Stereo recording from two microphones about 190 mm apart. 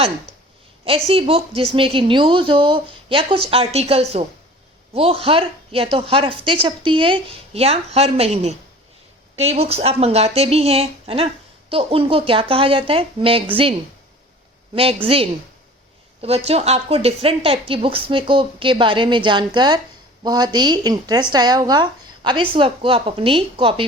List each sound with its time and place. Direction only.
0.9 s a woman's voice: 30° right (ahead or behind)
15.0 s a woman's voice: 30° right (ahead or behind)